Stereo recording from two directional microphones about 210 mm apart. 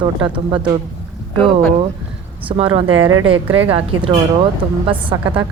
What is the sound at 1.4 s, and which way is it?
Speech, 5° left (ahead or behind).